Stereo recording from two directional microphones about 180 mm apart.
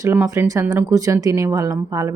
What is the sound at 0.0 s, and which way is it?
Speech, 15° right (ahead or behind).